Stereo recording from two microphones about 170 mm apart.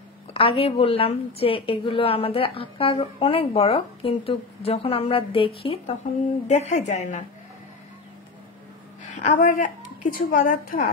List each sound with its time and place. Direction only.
0.3 s a woman's voice: 35° left (ahead or behind)
9.0 s a sound: 45° left (ahead or behind)
9.4 s a woman's voice: 50° left (ahead or behind)